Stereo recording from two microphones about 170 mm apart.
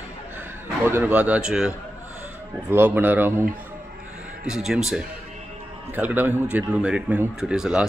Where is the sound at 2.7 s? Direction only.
10° right (ahead or behind).